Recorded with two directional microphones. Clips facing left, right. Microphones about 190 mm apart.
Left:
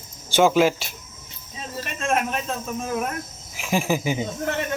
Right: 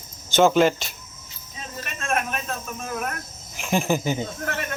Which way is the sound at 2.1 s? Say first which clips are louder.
Left 2 dB; 25° left (ahead or behind).